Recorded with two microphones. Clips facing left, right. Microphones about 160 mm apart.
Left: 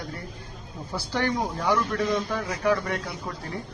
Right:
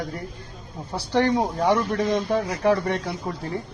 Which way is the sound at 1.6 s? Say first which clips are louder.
Right 2 dB; 35° right (ahead or behind).